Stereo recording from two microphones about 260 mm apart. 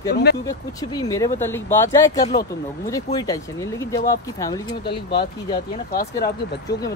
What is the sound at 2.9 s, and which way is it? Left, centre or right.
Speech, centre.